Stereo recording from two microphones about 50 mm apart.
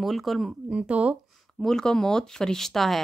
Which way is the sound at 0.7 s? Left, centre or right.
Right.